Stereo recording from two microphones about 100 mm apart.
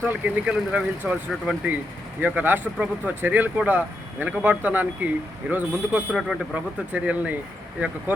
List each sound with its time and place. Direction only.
0.0 s speech: 15° right (ahead or behind)
6.1 s speech: 5° right (ahead or behind)
6.9 s speech: 15° right (ahead or behind)